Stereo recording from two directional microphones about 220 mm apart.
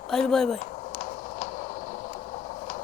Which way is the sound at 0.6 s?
40° left (ahead or behind).